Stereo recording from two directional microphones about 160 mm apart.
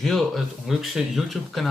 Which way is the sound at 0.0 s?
Centre (ahead or behind).